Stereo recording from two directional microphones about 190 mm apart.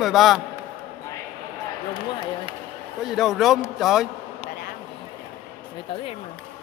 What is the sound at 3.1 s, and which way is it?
Speech, centre (ahead or behind).